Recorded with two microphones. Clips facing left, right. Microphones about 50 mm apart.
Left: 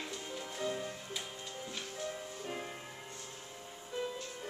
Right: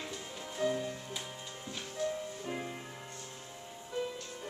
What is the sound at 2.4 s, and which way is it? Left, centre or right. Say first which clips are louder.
Music: right 1 dB; centre.